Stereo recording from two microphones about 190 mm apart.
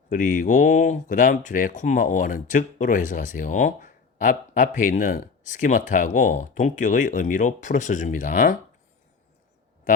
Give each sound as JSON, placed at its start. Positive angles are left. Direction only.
{"t": 0.1, "sound": "speech", "side_deg": 45}